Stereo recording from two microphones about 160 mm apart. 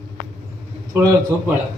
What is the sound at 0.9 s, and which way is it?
Speech, 15° right (ahead or behind).